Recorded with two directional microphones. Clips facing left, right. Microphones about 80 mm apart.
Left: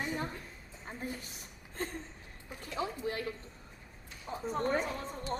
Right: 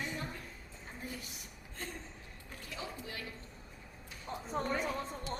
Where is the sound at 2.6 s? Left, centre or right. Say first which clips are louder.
Left 8 dB; left.